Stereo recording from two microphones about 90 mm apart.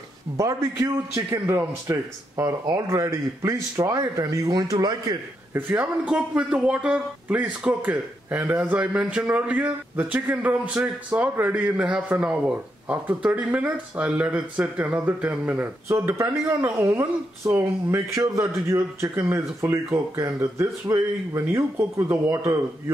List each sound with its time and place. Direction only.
0.4 s speech: 35° right (ahead or behind)
6.0 s a man's voice: 10° right (ahead or behind)
15.9 s speech: 30° right (ahead or behind)